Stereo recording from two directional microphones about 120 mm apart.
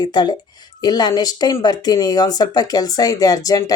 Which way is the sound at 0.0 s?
35° left (ahead or behind).